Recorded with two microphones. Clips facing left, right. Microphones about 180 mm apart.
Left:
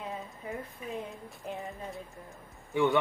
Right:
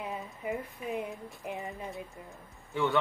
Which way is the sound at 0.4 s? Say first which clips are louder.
Right 4 dB; 15° right (ahead or behind).